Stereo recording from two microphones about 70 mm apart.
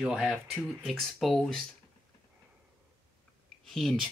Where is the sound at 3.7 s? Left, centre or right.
Centre.